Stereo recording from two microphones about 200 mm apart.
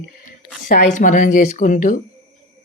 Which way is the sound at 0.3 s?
40° left (ahead or behind).